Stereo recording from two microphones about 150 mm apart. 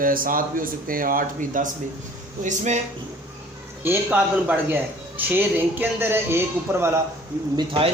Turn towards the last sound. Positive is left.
turn(degrees=-40)  # may be behind; listen again after turning